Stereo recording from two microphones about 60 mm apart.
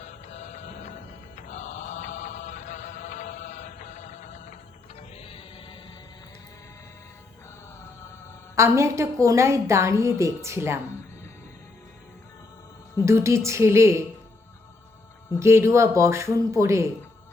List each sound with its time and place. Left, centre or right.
8.5 s a woman's voice: right
13.1 s a woman's voice: right
15.3 s a woman's voice: right